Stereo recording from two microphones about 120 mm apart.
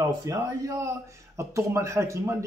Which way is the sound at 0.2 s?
30° right (ahead or behind).